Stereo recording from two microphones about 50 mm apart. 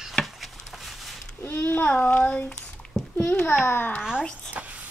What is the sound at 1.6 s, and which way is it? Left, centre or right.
Speech, left.